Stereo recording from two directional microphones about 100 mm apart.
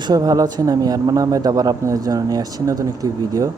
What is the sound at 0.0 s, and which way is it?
Speech, 40° right (ahead or behind).